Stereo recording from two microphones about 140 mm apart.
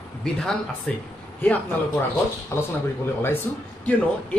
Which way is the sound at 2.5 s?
20° left (ahead or behind).